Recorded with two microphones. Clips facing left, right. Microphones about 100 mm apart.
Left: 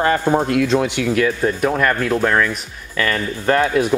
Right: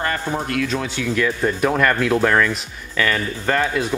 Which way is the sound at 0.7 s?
25° left (ahead or behind).